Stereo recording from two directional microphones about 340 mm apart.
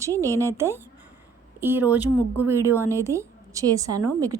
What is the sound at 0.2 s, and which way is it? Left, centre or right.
A woman's voice, centre.